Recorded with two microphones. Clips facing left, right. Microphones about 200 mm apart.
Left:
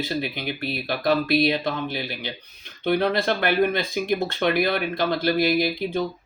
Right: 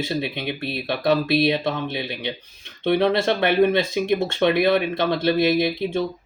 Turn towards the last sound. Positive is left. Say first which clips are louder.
# right 2 dB
turn(degrees=-25)  # may be behind; listen again after turning